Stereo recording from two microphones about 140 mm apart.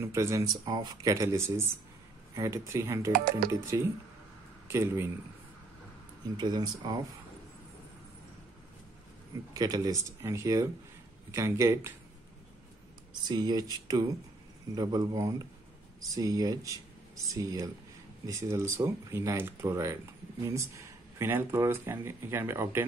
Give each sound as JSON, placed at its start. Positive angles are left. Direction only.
{"t": 0.0, "sound": "speech", "side_deg": -20}
{"t": 3.1, "sound": "speech", "side_deg": -90}
{"t": 3.6, "sound": "speech", "side_deg": -20}
{"t": 6.3, "sound": "speech", "side_deg": -30}
{"t": 9.5, "sound": "speech", "side_deg": -25}
{"t": 13.1, "sound": "speech", "side_deg": -30}